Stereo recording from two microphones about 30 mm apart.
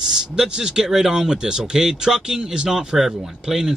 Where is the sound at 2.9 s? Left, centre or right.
Centre.